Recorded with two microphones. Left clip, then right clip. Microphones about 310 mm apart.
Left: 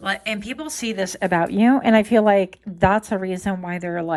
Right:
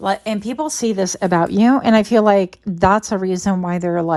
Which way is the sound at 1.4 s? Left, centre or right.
Left.